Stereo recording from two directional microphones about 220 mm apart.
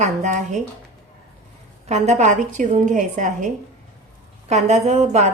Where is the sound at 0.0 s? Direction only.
35° right (ahead or behind).